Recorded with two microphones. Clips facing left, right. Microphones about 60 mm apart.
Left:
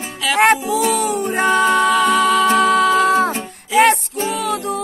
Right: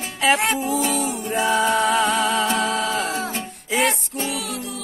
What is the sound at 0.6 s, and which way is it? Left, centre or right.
Music, left.